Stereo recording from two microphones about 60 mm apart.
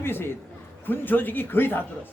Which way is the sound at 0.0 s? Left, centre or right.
Left.